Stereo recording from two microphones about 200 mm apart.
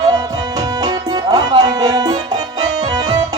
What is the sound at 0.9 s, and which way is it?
Music, 20° right (ahead or behind).